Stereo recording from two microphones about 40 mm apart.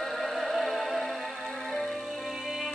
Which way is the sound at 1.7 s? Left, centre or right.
Left.